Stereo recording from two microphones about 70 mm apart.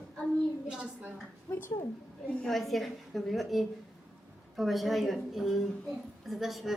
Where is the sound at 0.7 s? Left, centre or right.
Centre.